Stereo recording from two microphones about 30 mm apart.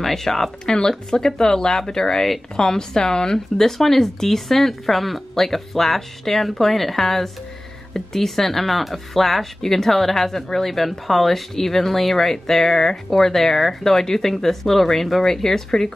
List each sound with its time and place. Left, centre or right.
0.0 s speech: centre